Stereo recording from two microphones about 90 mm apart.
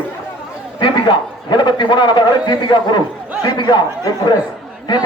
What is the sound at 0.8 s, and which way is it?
A man's voice, 60° left (ahead or behind).